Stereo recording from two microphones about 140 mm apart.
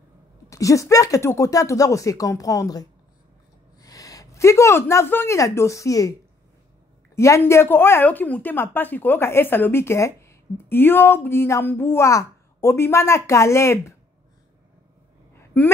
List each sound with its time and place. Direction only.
0.5 s speech: 25° left (ahead or behind)
7.2 s a woman's voice: 20° left (ahead or behind)
15.3 s a sound: 15° left (ahead or behind)